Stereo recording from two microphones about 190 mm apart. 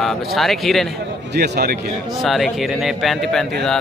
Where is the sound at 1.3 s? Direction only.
55° right (ahead or behind).